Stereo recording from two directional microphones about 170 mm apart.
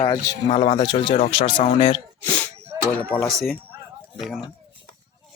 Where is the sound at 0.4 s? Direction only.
40° left (ahead or behind).